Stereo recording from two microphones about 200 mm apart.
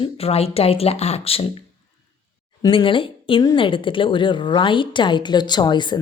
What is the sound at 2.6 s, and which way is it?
A woman's voice, 25° left (ahead or behind).